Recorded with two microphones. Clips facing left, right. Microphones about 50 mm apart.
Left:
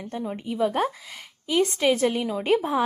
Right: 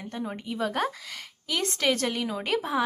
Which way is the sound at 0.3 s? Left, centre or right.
Centre.